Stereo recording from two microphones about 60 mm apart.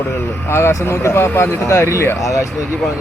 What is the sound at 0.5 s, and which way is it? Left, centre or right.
Speech, left.